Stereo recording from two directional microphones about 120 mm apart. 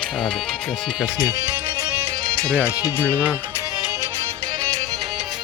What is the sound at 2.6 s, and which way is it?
Speech, 20° left (ahead or behind).